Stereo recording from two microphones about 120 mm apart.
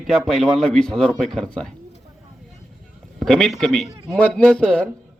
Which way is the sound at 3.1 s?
5° left (ahead or behind).